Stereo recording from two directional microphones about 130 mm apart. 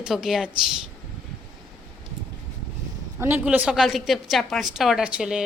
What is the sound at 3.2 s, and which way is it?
A woman's voice, 20° right (ahead or behind).